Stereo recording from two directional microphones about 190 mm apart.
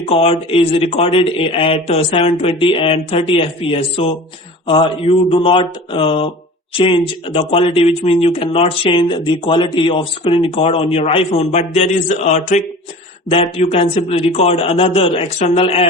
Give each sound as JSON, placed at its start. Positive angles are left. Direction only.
{"t": 0.0, "sound": "a man's voice", "side_deg": 30}